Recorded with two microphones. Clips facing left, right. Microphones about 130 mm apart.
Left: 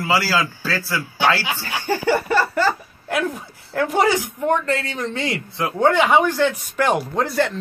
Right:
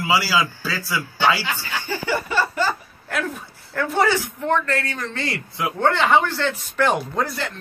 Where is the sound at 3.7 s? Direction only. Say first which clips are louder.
Left 2 dB; 15° left (ahead or behind).